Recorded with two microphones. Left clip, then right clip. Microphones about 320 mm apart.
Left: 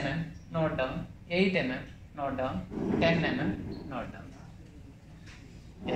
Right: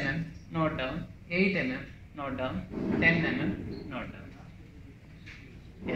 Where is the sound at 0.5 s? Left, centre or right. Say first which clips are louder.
Even; left.